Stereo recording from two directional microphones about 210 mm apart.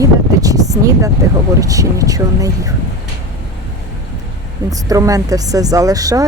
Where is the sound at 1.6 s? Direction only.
15° right (ahead or behind).